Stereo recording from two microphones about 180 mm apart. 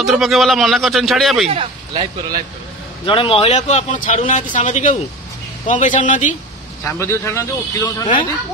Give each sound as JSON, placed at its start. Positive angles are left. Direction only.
{"t": 0.0, "sound": "speech", "side_deg": 0}
{"t": 1.5, "sound": "speech", "side_deg": -30}
{"t": 3.1, "sound": "a man's voice", "side_deg": 30}
{"t": 6.8, "sound": "a man's voice", "side_deg": 15}